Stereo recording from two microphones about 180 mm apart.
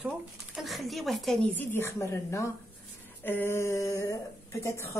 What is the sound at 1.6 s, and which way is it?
Speech, 10° left (ahead or behind).